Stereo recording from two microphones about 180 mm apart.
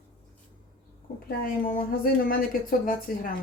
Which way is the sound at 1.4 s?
50° left (ahead or behind).